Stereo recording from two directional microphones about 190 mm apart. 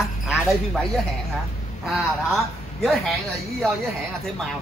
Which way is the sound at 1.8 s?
Centre (ahead or behind).